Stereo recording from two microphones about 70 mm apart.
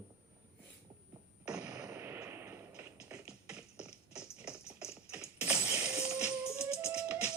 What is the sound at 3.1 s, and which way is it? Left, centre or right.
Music, right.